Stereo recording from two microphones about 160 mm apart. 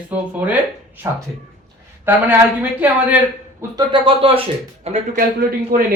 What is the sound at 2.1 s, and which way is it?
Speech, 10° right (ahead or behind).